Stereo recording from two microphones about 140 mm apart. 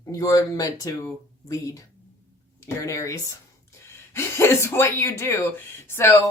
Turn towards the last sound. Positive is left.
turn(degrees=15)  # may be behind; listen again after turning